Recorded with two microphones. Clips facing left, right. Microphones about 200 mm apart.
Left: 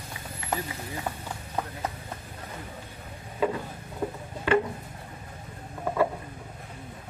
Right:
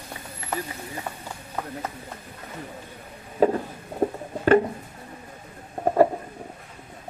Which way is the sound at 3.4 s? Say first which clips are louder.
Right 7 dB; 45° right (ahead or behind).